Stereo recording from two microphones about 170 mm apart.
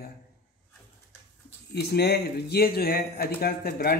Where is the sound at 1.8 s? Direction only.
75° left (ahead or behind).